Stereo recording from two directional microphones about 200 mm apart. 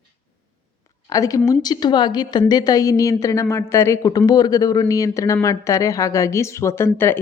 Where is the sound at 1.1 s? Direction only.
15° left (ahead or behind).